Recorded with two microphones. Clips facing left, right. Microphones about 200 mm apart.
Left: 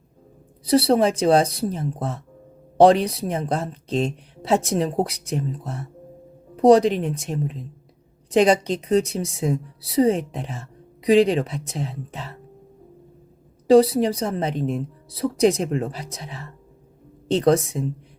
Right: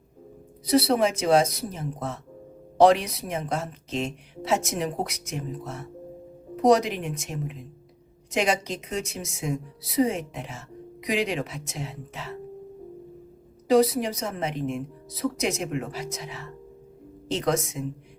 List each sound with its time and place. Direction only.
0.6 s speech: 30° left (ahead or behind)
13.7 s speech: 30° left (ahead or behind)